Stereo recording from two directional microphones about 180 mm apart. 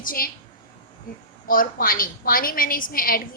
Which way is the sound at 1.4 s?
50° left (ahead or behind).